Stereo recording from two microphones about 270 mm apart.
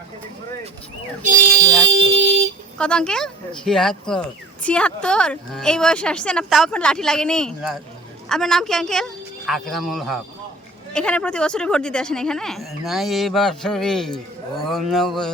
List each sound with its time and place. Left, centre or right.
1.2 s speech: right
2.7 s speech: centre